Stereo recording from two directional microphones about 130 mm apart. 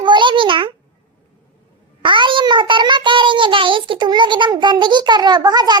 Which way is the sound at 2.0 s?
40° right (ahead or behind).